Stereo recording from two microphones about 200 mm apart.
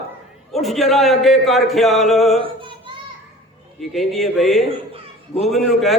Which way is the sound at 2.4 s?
25° right (ahead or behind).